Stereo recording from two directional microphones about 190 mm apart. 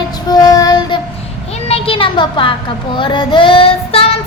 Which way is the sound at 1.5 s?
30° left (ahead or behind).